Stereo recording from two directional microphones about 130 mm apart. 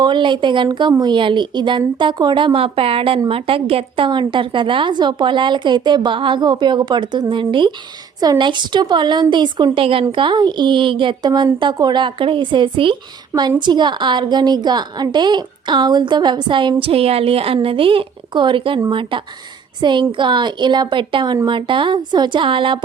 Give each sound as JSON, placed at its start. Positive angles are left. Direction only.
{"t": 0.0, "sound": "a woman's voice", "side_deg": -35}
{"t": 16.8, "sound": "a woman's voice", "side_deg": -50}